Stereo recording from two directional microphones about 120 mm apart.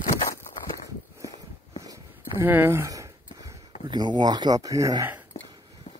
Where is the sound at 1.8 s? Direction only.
30° right (ahead or behind).